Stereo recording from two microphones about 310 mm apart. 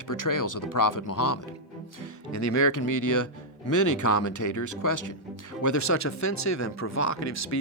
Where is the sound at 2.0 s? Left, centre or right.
Left.